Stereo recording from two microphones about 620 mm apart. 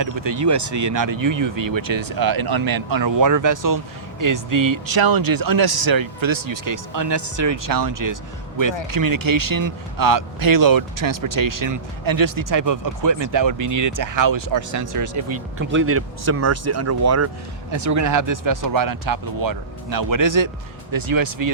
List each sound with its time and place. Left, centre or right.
0.0 s speech: right